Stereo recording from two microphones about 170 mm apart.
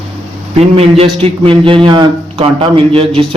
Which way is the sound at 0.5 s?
35° right (ahead or behind).